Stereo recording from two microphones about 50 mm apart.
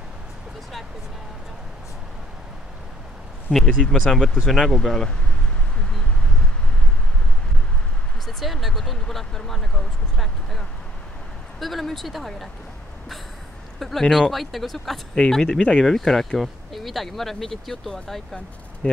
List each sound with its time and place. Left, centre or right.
3.6 s speech: centre
8.3 s speech: centre
11.6 s speech: centre
13.7 s speech: centre
15.1 s speech: centre